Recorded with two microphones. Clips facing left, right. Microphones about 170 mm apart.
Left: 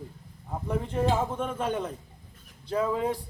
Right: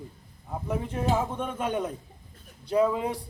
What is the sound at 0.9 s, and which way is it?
A man's voice, 10° right (ahead or behind).